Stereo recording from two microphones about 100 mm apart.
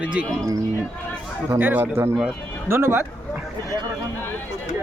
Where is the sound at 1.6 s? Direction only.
20° right (ahead or behind).